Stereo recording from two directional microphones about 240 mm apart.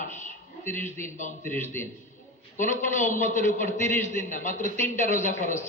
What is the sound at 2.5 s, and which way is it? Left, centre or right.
Speech, left.